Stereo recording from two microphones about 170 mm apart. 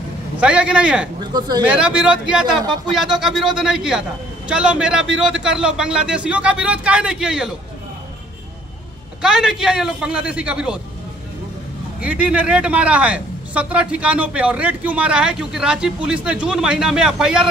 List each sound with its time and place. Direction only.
0.4 s speech: 5° right (ahead or behind)
1.3 s speech: 25° right (ahead or behind)
1.7 s a man's voice: 5° right (ahead or behind)
9.2 s a man's voice: 5° right (ahead or behind)
12.0 s speech: 10° right (ahead or behind)